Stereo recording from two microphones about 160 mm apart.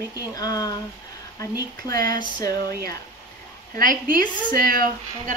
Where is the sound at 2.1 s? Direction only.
55° right (ahead or behind).